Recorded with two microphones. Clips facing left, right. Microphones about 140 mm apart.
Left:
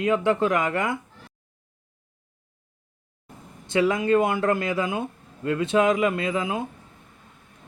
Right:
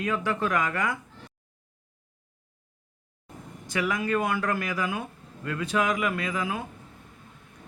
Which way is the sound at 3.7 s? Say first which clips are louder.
Left 7 dB; 25° left (ahead or behind).